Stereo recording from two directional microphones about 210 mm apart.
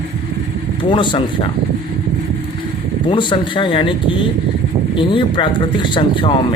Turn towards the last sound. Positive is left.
turn(degrees=25)  # may be behind; listen again after turning